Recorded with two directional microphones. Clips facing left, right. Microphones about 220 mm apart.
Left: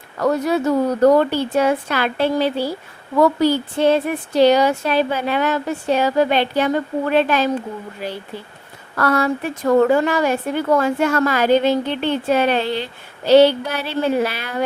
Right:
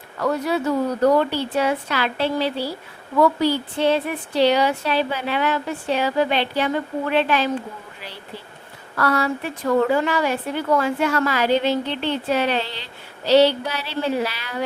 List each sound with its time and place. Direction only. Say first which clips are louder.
0.2 s a woman's voice: left 4 dB; 45° left (ahead or behind)